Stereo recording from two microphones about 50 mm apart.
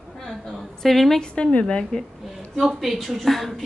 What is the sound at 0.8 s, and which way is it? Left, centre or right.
Speech, centre.